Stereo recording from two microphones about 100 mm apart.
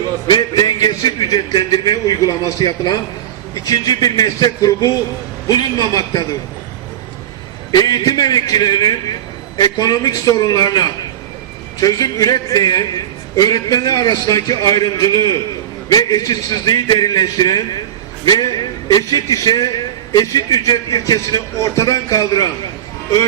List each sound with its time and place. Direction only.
0.3 s a man's voice: 40° left (ahead or behind)
7.7 s a man's voice: 40° left (ahead or behind)